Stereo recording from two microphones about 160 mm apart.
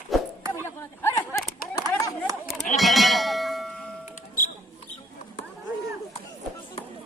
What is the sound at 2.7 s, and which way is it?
Music, centre (ahead or behind).